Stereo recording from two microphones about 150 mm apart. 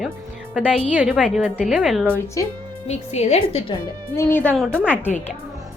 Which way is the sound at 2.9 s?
45° left (ahead or behind).